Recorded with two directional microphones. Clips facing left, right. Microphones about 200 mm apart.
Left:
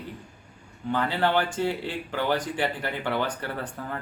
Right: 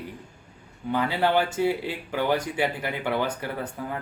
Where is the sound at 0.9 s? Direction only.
10° right (ahead or behind).